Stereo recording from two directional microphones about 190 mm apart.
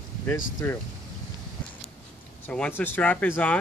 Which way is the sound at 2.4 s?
5° left (ahead or behind).